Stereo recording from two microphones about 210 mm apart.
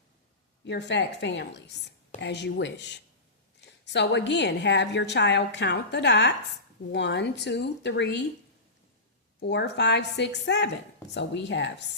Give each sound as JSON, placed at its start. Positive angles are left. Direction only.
{"t": 0.6, "sound": "a woman's voice", "side_deg": 55}
{"t": 3.9, "sound": "a woman's voice", "side_deg": 55}
{"t": 9.4, "sound": "a woman's voice", "side_deg": 55}